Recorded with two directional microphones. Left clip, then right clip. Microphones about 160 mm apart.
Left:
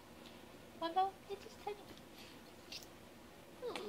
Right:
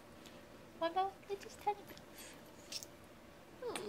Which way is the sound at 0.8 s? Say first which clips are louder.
Even; 50° right (ahead or behind).